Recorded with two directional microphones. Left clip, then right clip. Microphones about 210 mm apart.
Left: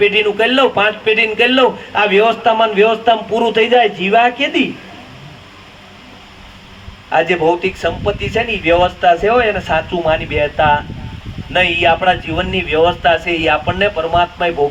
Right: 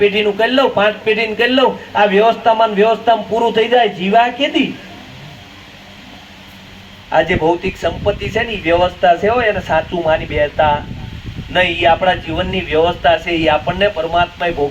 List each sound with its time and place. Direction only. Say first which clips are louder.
0.0 s a man's voice: left 1 dB; 40° left (ahead or behind)
7.1 s a man's voice: even; 40° left (ahead or behind)